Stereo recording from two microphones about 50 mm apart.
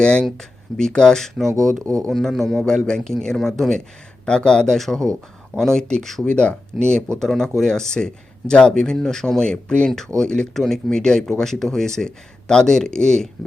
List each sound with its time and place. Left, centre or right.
0.0 s speech: centre
1.8 s speech: right
2.0 s speech: centre
2.6 s speech: centre
6.2 s speech: left
10.5 s speech: centre